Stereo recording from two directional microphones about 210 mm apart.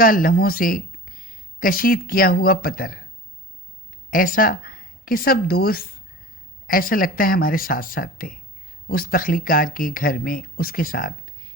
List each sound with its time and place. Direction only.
0.0 s speech: 45° left (ahead or behind)
4.1 s a woman's voice: 40° left (ahead or behind)